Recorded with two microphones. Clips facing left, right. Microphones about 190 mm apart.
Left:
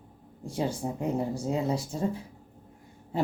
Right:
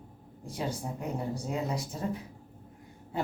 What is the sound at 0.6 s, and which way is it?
Speech, 25° left (ahead or behind).